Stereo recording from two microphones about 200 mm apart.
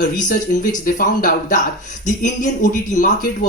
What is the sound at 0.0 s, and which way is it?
Speech, 40° left (ahead or behind).